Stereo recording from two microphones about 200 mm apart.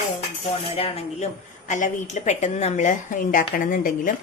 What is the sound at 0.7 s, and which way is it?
A woman's voice, 30° left (ahead or behind).